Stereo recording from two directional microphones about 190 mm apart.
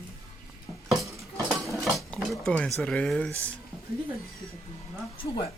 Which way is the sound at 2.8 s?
5° left (ahead or behind).